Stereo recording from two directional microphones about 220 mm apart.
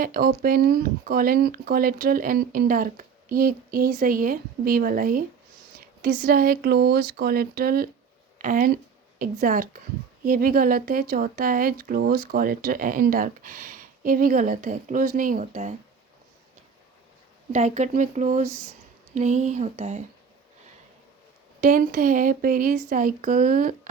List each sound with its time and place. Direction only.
0.0 s speech: 40° right (ahead or behind)
6.2 s speech: 40° right (ahead or behind)
17.5 s speech: 30° right (ahead or behind)
21.6 s speech: 40° right (ahead or behind)